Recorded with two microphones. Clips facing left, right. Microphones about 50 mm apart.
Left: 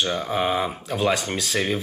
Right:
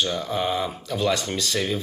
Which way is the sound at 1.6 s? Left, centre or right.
Left.